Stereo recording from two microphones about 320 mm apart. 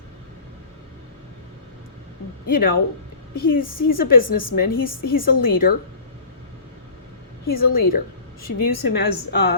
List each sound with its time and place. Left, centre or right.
2.5 s a woman's voice: left
7.4 s a woman's voice: left